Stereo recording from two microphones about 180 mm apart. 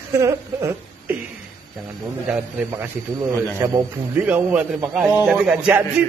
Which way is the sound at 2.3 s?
5° right (ahead or behind).